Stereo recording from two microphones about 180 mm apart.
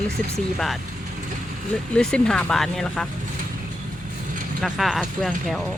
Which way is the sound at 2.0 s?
5° left (ahead or behind).